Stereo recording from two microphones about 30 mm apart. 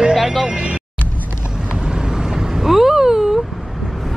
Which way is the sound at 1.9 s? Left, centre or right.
Right.